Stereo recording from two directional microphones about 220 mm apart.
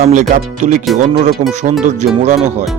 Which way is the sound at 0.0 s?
35° right (ahead or behind).